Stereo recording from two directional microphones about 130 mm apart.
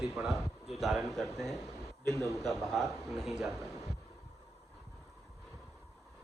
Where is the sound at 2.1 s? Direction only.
25° right (ahead or behind).